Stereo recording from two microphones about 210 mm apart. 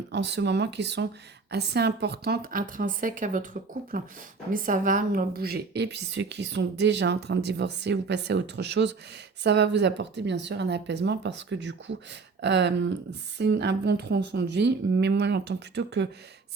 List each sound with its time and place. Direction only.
0.1 s a woman's voice: 55° right (ahead or behind)